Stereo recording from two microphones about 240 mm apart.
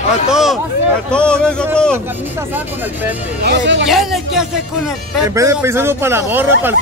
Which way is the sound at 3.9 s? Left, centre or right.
Centre.